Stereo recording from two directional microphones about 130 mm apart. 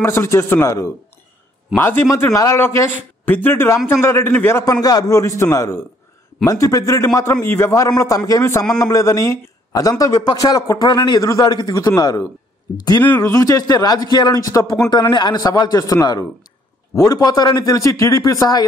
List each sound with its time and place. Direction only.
0.0 s a man's voice: 20° left (ahead or behind)